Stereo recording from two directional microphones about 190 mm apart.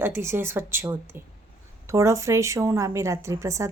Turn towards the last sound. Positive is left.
turn(degrees=-15)  # may be behind; listen again after turning